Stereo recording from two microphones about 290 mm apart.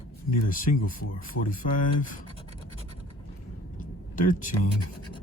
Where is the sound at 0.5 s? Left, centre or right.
Left.